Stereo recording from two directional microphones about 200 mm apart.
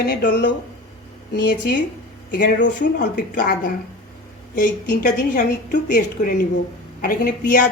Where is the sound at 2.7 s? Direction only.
40° left (ahead or behind).